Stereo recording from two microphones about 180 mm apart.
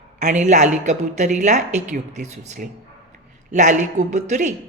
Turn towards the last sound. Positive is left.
turn(degrees=-40)  # may be behind; listen again after turning